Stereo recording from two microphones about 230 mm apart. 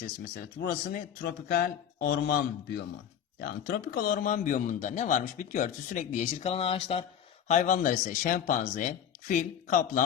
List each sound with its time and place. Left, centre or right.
0.3 s speech: left